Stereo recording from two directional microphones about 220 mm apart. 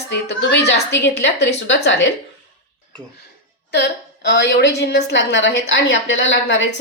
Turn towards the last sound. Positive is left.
turn(degrees=60)  # may be behind; listen again after turning